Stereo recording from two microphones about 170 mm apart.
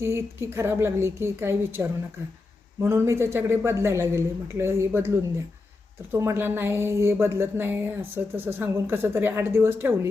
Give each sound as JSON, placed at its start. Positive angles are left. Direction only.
{"t": 0.0, "sound": "a woman's voice", "side_deg": -15}